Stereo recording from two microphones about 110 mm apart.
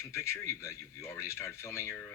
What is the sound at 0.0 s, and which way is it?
Speech, 25° left (ahead or behind).